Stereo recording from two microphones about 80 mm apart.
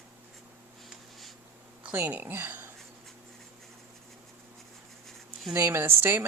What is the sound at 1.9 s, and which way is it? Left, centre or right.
Speech, right.